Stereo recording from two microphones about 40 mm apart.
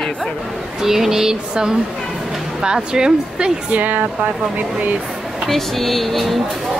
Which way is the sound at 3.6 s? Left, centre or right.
Right.